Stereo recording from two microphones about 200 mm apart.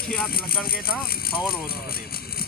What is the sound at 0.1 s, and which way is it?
Speech, 50° left (ahead or behind).